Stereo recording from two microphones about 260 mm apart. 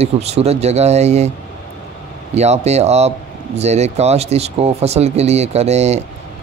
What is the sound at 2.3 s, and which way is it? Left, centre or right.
Speech, right.